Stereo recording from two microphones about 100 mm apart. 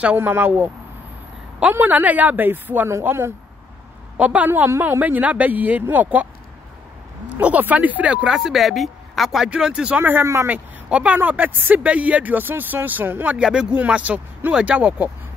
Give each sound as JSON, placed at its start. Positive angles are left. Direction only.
{"t": 0.0, "sound": "speech", "side_deg": -15}
{"t": 1.7, "sound": "speech", "side_deg": -20}
{"t": 7.3, "sound": "speech", "side_deg": -15}
{"t": 8.4, "sound": "speech", "side_deg": 0}
{"t": 10.5, "sound": "speech", "side_deg": -10}